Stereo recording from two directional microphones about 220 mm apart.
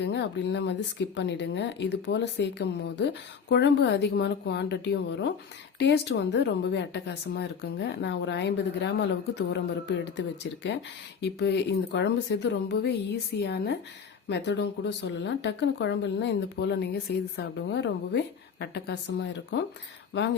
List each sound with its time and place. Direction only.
0.0 s speech: 50° left (ahead or behind)